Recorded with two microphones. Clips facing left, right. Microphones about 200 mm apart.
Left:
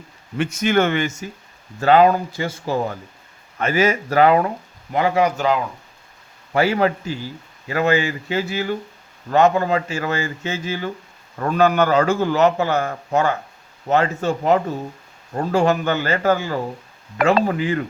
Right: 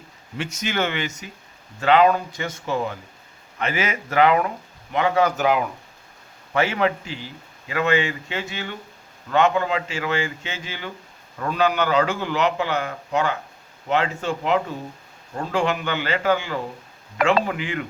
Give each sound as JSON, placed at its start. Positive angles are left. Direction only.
{"t": 0.3, "sound": "a man's voice", "side_deg": 55}
{"t": 1.8, "sound": "speech", "side_deg": 40}
{"t": 5.4, "sound": "speech", "side_deg": -10}
{"t": 6.5, "sound": "a man's voice", "side_deg": 35}